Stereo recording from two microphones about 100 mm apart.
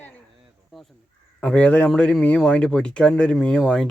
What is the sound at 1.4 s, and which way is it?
Speech, 10° left (ahead or behind).